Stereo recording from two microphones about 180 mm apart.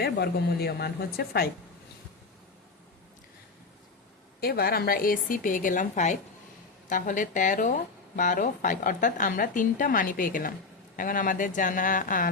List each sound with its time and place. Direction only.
0.0 s a woman's voice: 60° left (ahead or behind)
4.4 s speech: 55° left (ahead or behind)